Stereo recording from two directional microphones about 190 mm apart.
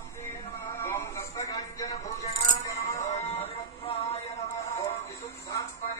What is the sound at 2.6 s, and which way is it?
Music, 15° left (ahead or behind).